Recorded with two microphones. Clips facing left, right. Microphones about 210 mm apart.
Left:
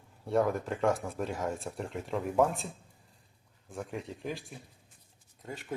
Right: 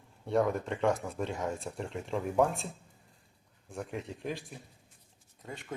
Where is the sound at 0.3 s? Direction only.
Centre (ahead or behind).